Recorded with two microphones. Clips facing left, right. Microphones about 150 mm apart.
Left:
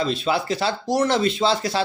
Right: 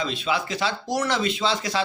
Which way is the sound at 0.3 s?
30° left (ahead or behind).